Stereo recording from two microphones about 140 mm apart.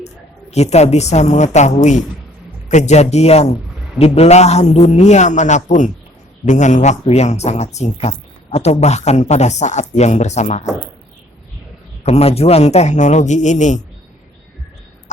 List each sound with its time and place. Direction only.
0.5 s a man's voice: 50° left (ahead or behind)
12.0 s a man's voice: 50° left (ahead or behind)